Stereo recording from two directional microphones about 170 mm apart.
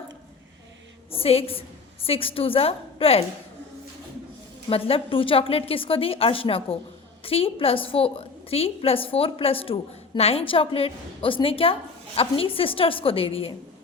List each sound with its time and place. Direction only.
1.1 s a woman's voice: 35° left (ahead or behind)
4.7 s a woman's voice: 35° left (ahead or behind)